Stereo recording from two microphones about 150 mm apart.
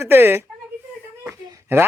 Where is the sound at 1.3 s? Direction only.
20° right (ahead or behind).